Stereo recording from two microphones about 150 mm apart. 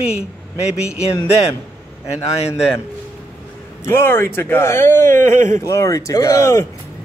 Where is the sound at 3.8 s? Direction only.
15° left (ahead or behind).